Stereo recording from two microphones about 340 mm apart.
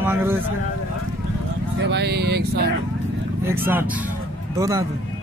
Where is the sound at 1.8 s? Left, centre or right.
Right.